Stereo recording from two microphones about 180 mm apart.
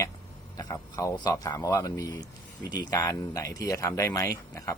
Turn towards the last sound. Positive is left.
turn(degrees=15)  # may be behind; listen again after turning